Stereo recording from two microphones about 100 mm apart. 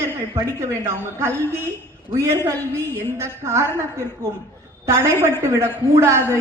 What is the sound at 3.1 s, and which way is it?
Speech, 25° right (ahead or behind).